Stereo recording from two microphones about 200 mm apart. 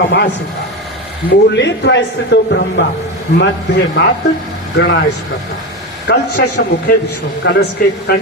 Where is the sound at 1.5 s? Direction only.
60° left (ahead or behind).